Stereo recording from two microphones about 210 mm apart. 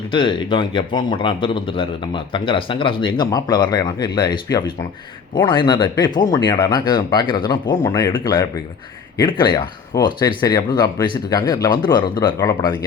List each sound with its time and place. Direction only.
0.1 s speech: 25° left (ahead or behind)